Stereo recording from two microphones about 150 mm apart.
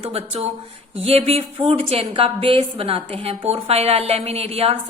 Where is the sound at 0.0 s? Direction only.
40° right (ahead or behind).